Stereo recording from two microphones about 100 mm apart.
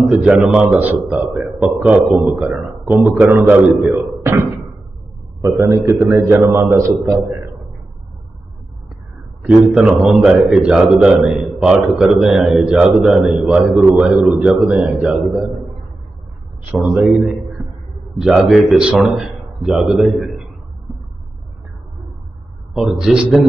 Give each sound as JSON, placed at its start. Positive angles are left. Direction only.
{"t": 0.2, "sound": "a man's voice", "side_deg": -5}
{"t": 5.4, "sound": "a man's voice", "side_deg": -30}
{"t": 9.4, "sound": "a man's voice", "side_deg": -10}
{"t": 16.7, "sound": "a man's voice", "side_deg": 0}
{"t": 18.2, "sound": "a man's voice", "side_deg": -5}
{"t": 22.8, "sound": "a man's voice", "side_deg": -5}